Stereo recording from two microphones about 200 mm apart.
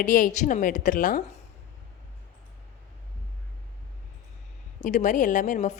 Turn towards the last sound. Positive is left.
turn(degrees=40)  # may be behind; listen again after turning